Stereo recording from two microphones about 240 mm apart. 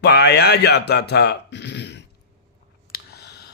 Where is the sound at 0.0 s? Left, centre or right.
Left.